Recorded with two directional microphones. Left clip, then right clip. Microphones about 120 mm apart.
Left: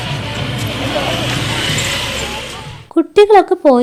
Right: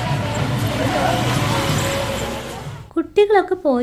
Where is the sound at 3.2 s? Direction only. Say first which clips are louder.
Left 7 dB; 45° left (ahead or behind).